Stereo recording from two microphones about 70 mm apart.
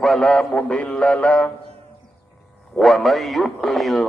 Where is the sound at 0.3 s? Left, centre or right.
Centre.